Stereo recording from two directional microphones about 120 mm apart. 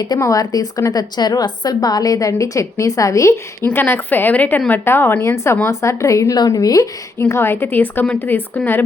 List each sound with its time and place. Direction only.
0.2 s a woman's voice: 30° left (ahead or behind)